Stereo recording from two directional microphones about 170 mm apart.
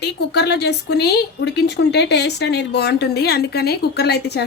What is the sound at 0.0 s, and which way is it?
A woman's voice, 75° left (ahead or behind).